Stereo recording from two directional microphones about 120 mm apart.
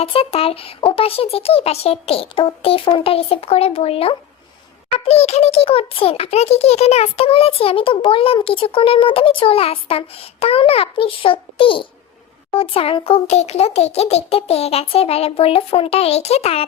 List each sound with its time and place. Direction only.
0.0 s a child's voice: 50° left (ahead or behind)